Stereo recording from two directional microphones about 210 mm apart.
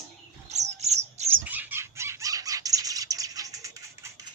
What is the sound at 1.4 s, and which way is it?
Bird, 10° right (ahead or behind).